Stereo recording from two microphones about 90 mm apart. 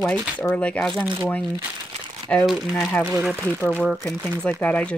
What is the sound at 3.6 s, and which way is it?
Speech, 20° left (ahead or behind).